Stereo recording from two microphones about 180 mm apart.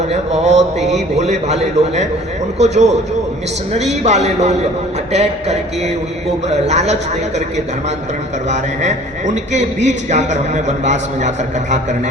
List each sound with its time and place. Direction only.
0.1 s a man's voice: 40° right (ahead or behind)